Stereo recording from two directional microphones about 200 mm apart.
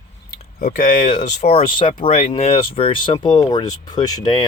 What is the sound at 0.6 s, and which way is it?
Speech, 40° left (ahead or behind).